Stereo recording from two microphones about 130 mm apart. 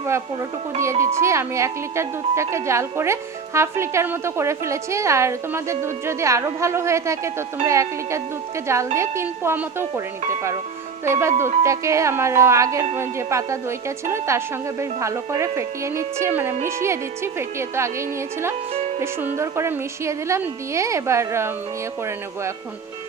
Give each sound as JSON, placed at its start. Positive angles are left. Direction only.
{"t": 1.2, "sound": "speech", "side_deg": -20}
{"t": 11.0, "sound": "speech", "side_deg": -20}
{"t": 18.7, "sound": "music", "side_deg": -55}
{"t": 19.4, "sound": "speech", "side_deg": -20}